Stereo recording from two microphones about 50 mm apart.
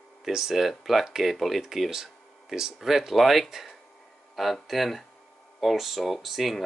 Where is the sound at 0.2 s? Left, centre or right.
Centre.